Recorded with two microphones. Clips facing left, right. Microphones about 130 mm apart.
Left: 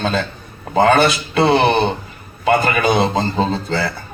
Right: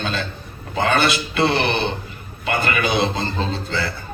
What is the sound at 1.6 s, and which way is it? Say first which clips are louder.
A man's voice: left 6 dB; 40° left (ahead or behind).